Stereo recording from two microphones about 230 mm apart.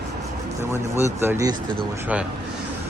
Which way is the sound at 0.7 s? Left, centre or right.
Centre.